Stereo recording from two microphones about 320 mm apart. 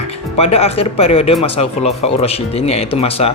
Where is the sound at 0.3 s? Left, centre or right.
Centre.